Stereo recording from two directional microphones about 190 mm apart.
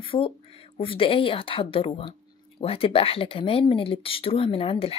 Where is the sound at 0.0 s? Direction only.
30° left (ahead or behind).